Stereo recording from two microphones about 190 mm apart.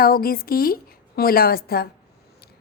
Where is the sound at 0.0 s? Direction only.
50° left (ahead or behind).